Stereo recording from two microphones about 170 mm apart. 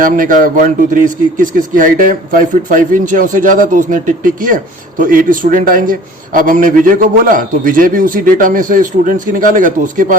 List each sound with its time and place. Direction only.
0.0 s speech: 55° right (ahead or behind)